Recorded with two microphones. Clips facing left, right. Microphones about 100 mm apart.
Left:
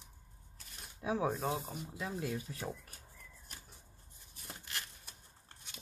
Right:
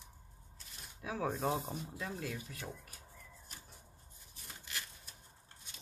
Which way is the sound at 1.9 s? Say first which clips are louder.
Left 7 dB; 15° left (ahead or behind).